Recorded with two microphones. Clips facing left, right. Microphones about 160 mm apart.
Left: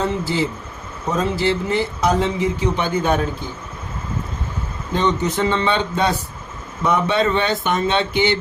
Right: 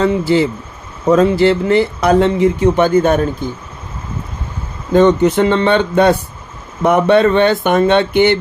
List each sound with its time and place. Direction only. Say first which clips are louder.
0.0 s speech: right 8 dB; 65° right (ahead or behind)
4.9 s speech: right 10 dB; 55° right (ahead or behind)